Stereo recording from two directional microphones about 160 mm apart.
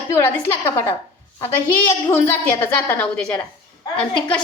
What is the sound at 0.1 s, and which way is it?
A woman's voice, 15° left (ahead or behind).